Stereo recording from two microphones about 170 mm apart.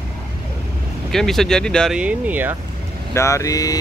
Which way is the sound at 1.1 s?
Centre (ahead or behind).